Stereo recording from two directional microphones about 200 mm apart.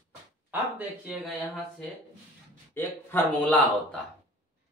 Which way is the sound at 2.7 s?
10° left (ahead or behind).